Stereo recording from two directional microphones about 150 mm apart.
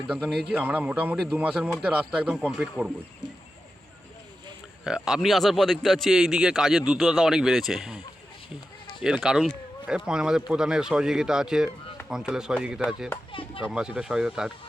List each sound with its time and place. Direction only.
0.1 s a man's voice: 5° right (ahead or behind)
4.8 s a man's voice: 5° right (ahead or behind)
9.0 s a man's voice: 5° right (ahead or behind)
13.3 s chop: 35° left (ahead or behind)
13.7 s a man's voice: 5° right (ahead or behind)